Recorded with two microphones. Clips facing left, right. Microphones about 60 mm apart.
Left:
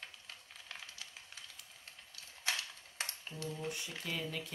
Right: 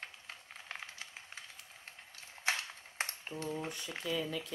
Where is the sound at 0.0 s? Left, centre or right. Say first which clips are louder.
Right 3 dB; right.